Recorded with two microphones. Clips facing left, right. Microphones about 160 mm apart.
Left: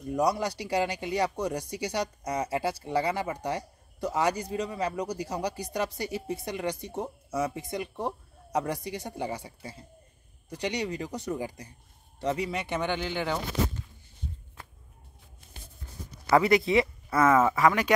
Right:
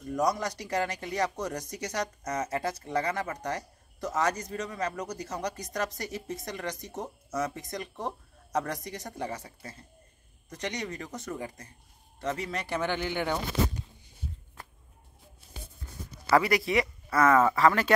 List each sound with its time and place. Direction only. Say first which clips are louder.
0.0 s speech: left 2 dB; 10° left (ahead or behind)
16.3 s speech: left 2 dB; 25° left (ahead or behind)